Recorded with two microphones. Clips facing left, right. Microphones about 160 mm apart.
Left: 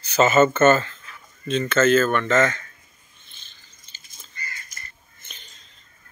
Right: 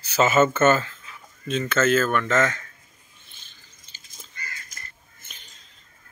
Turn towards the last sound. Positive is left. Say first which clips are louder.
# left 2 dB
turn(degrees=-10)  # may be behind; listen again after turning